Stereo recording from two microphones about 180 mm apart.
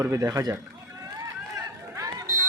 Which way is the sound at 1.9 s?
15° right (ahead or behind).